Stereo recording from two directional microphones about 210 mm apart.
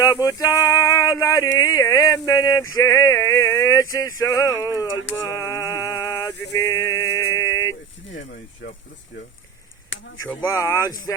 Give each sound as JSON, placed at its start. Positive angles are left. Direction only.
{"t": 0.0, "sound": "male singing", "side_deg": 15}
{"t": 5.3, "sound": "a sound", "side_deg": 15}
{"t": 6.6, "sound": "mantra", "side_deg": 15}
{"t": 7.3, "sound": "a sound", "side_deg": 15}
{"t": 8.6, "sound": "speech", "side_deg": 60}
{"t": 10.2, "sound": "male singing", "side_deg": 10}